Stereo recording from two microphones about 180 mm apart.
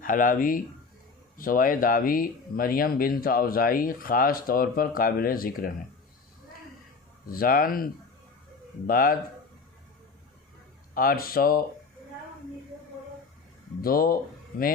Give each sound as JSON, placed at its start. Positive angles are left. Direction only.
{"t": 0.0, "sound": "speech", "side_deg": 50}
{"t": 7.3, "sound": "speech", "side_deg": 55}
{"t": 8.9, "sound": "speech", "side_deg": 55}
{"t": 10.9, "sound": "speech", "side_deg": 55}
{"t": 13.8, "sound": "speech", "side_deg": 55}